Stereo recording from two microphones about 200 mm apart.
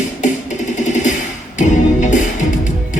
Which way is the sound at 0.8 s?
35° left (ahead or behind).